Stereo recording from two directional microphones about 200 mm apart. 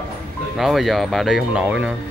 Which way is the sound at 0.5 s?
Centre (ahead or behind).